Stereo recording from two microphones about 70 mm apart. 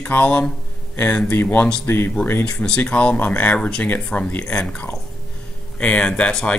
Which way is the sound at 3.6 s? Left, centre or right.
Centre.